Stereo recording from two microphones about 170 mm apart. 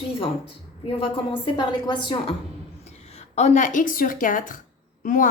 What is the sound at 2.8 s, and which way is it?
A woman's voice, 40° left (ahead or behind).